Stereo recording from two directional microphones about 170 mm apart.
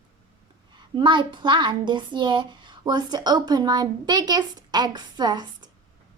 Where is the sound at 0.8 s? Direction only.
25° right (ahead or behind).